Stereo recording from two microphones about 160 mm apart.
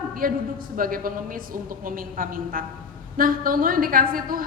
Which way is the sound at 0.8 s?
60° right (ahead or behind).